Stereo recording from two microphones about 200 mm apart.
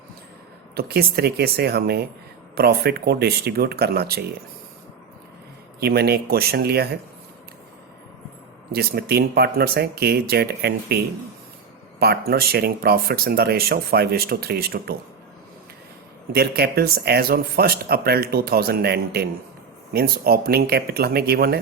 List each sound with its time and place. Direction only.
0.8 s speech: 50° right (ahead or behind)
5.8 s speech: 50° right (ahead or behind)
8.7 s speech: 50° right (ahead or behind)
16.3 s speech: 50° right (ahead or behind)